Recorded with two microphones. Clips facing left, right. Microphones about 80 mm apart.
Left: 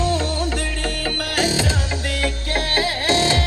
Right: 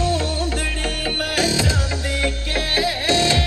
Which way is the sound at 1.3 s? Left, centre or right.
Left.